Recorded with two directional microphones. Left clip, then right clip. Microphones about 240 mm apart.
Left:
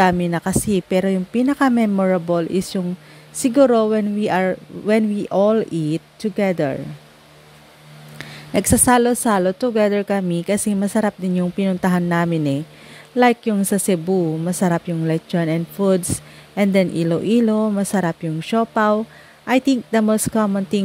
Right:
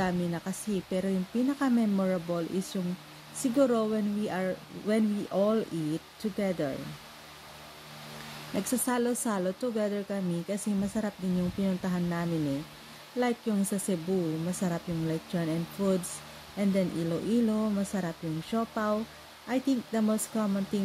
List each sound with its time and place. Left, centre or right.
0.0 s speech: left
8.5 s speech: left